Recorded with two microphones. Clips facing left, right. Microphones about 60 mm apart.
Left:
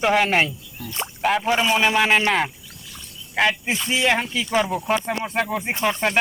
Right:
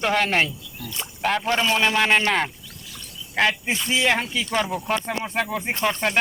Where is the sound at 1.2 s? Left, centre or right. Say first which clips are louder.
Left 2 dB; centre.